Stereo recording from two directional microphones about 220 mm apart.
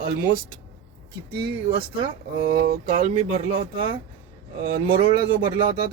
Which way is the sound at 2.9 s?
30° right (ahead or behind).